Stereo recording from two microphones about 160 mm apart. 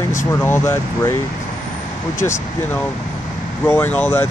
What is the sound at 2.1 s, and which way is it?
Speech, 15° left (ahead or behind).